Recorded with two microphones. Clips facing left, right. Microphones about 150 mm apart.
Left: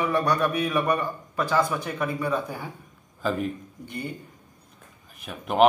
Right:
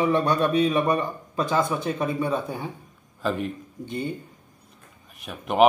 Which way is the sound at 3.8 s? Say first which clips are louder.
Right 5 dB; 25° right (ahead or behind).